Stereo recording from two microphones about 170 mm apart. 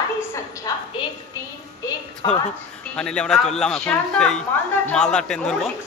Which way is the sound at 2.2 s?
25° left (ahead or behind).